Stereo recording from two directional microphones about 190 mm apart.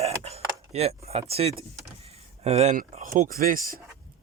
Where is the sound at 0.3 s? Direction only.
35° right (ahead or behind); by 3.8 s 50° right (ahead or behind).